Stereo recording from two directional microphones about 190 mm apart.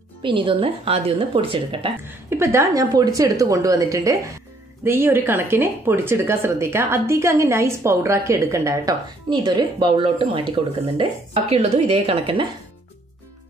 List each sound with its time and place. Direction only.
0.2 s a woman's voice: 25° right (ahead or behind)
2.0 s a woman's voice: 15° right (ahead or behind); by 12.4 s 30° right (ahead or behind)